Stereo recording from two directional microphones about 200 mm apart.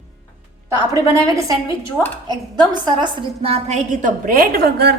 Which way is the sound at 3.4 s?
35° right (ahead or behind).